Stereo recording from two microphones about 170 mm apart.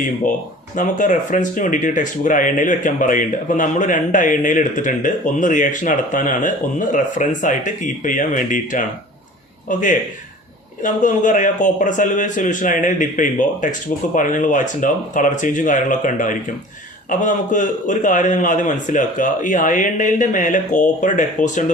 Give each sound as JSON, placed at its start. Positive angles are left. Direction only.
{"t": 0.8, "sound": "speech", "side_deg": 50}